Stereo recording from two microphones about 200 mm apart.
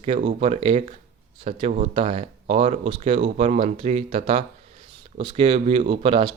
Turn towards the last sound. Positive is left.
turn(degrees=-25)  # may be behind; listen again after turning